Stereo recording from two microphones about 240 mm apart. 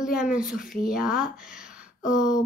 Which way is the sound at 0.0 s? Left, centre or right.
Centre.